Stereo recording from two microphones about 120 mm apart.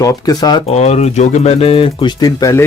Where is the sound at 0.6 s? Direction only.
65° left (ahead or behind); by 2.1 s 50° left (ahead or behind).